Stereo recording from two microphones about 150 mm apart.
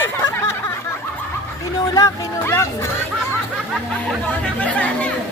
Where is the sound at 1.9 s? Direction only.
20° left (ahead or behind).